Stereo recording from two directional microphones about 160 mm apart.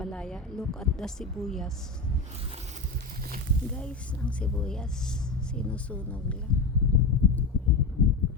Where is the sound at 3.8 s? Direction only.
5° left (ahead or behind).